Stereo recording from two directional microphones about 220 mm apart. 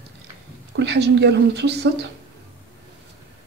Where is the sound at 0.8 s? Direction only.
50° right (ahead or behind).